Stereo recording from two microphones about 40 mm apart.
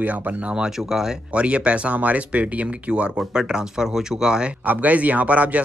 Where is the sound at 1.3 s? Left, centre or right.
Right.